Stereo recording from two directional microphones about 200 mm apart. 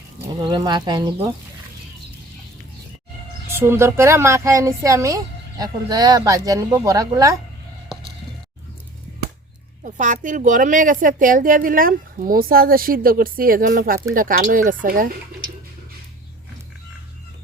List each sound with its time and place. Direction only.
0.3 s speech: 20° right (ahead or behind)
3.5 s a woman's voice: 15° right (ahead or behind)
9.8 s a woman's voice: 40° right (ahead or behind)